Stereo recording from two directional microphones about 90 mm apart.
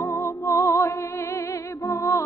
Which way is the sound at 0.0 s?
30° left (ahead or behind).